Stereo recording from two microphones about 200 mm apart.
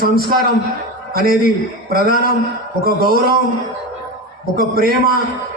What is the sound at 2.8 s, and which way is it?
Speech, 50° right (ahead or behind).